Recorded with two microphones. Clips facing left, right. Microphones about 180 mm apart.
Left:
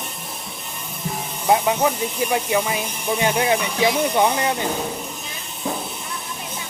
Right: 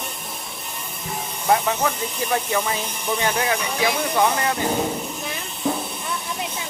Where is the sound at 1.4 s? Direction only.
15° left (ahead or behind).